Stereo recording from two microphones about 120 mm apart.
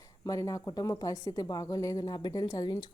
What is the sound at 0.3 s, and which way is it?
A woman's voice, 30° left (ahead or behind).